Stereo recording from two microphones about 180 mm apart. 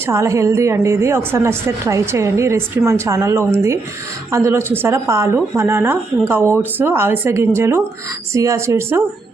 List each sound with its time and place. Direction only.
0.1 s a woman's voice: 15° right (ahead or behind)